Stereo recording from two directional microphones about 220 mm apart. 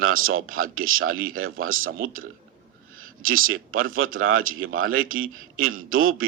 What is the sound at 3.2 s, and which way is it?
Speech, 65° right (ahead or behind).